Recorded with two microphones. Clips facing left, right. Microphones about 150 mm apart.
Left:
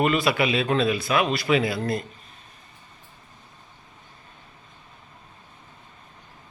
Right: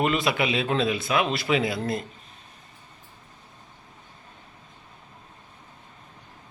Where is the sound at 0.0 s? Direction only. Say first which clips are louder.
Left 2 dB; 20° right (ahead or behind).